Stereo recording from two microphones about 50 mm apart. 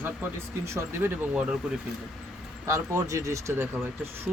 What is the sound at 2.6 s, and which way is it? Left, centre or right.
Speech, right.